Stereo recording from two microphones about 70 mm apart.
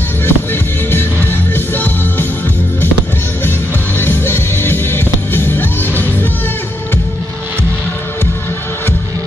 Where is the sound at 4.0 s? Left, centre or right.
Left.